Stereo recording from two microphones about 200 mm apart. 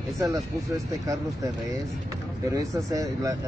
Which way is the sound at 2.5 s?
15° right (ahead or behind).